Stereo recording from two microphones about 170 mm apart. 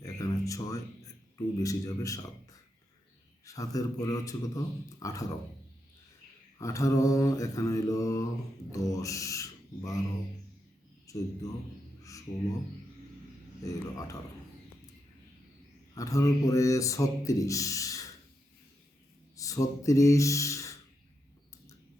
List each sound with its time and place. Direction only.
0.0 s a sound: 20° left (ahead or behind)
1.6 s speech: 20° left (ahead or behind)
3.4 s speech: 20° left (ahead or behind)
6.6 s speech: 20° left (ahead or behind)
11.1 s a man's voice: 20° left (ahead or behind)
13.7 s speech: 20° left (ahead or behind)
16.0 s speech: 20° left (ahead or behind)
19.4 s speech: 20° left (ahead or behind)